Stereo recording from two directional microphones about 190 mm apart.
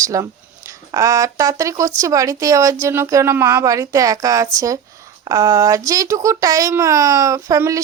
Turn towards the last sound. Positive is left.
turn(degrees=-15)  # may be behind; listen again after turning